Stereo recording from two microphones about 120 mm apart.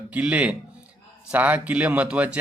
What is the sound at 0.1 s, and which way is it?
Speech, 10° right (ahead or behind).